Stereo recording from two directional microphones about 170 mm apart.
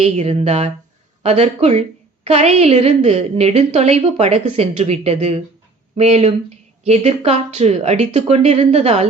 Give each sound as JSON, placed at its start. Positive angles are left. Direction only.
{"t": 0.0, "sound": "a woman's voice", "side_deg": -40}